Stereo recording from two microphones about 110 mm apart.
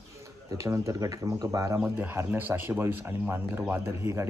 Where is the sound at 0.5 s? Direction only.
30° right (ahead or behind).